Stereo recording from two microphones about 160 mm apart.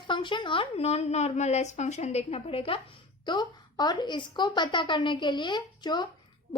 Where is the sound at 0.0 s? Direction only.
30° left (ahead or behind).